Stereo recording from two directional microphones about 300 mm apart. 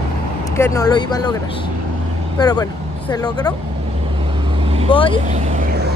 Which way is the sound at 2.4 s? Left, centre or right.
Centre.